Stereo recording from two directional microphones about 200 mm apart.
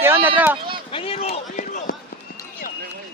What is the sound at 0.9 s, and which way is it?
Speech, 30° left (ahead or behind).